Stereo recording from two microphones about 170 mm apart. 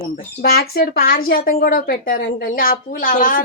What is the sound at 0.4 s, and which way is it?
Speech, 60° left (ahead or behind).